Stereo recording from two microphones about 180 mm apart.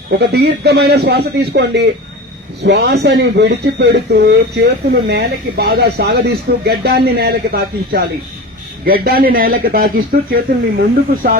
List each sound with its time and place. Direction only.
0.2 s speech: 65° right (ahead or behind)